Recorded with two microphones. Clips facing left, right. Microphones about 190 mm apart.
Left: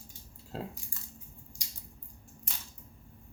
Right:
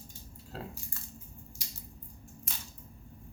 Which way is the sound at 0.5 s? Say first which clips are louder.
Left 3 dB; 25° left (ahead or behind).